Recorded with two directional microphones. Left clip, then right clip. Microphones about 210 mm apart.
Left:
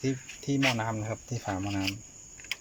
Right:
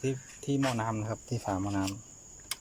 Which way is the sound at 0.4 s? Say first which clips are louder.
Left 3 dB; centre (ahead or behind).